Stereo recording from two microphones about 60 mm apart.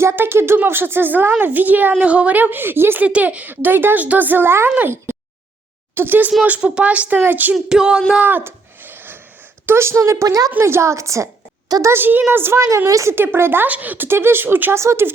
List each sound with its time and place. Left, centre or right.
0.0 s a woman's voice: right
3.0 s a woman's voice: right
6.4 s speech: right
7.5 s a sound: centre
8.2 s a sound: right
9.6 s a woman's voice: right
10.6 s a woman's voice: right
11.9 s a woman's voice: right
12.5 s a woman's voice: right
13.1 s a woman's voice: right
13.7 s speech: right
14.1 s a woman's voice: right
14.8 s a woman's voice: right